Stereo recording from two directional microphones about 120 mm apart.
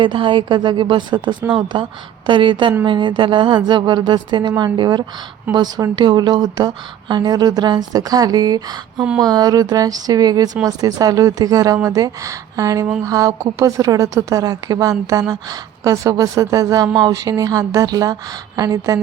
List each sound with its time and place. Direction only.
0.0 s a woman's voice: 40° right (ahead or behind)
1.4 s speech: 10° right (ahead or behind)
1.7 s a woman's voice: 40° right (ahead or behind)